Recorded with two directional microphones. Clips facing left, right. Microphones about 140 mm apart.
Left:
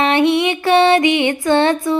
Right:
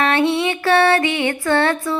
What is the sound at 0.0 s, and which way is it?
Female singing, 15° left (ahead or behind).